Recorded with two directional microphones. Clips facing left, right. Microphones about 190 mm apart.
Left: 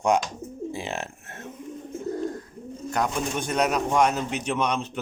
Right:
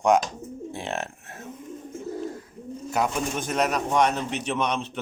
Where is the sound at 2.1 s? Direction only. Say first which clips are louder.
Left 3 dB; 5° right (ahead or behind).